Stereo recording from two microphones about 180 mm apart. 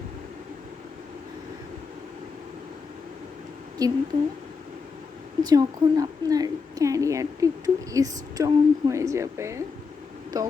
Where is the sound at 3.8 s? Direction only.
20° right (ahead or behind).